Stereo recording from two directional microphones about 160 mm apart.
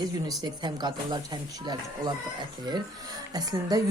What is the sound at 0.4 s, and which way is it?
Speech, 25° right (ahead or behind).